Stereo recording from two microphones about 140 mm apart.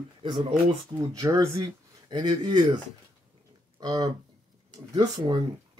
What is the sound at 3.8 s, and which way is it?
Speech, 30° right (ahead or behind).